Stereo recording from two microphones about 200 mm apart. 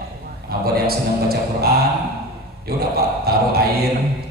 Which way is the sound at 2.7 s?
50° right (ahead or behind).